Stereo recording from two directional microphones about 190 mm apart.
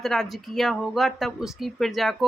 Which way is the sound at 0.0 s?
Centre (ahead or behind).